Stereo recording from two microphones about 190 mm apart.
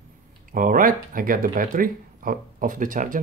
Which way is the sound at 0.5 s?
45° right (ahead or behind).